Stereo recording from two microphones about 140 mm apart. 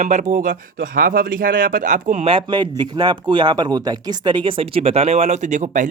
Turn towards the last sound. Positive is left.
turn(degrees=-60)  # may be behind; listen again after turning